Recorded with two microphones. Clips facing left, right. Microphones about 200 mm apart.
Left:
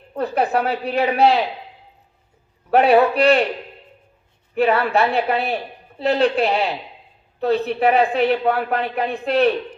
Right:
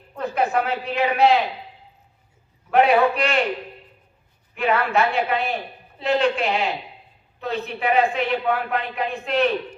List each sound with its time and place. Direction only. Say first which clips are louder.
0.1 s a sound: left 4 dB; 35° left (ahead or behind)
0.5 s a woman's voice: left 3 dB; 35° left (ahead or behind)
2.6 s a woman's voice: left 3 dB; 40° left (ahead or behind)
4.5 s a woman's voice: left 3 dB; 35° left (ahead or behind)